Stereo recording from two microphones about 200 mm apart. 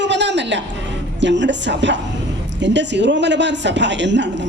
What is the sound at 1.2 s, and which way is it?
A man's voice, 60° right (ahead or behind).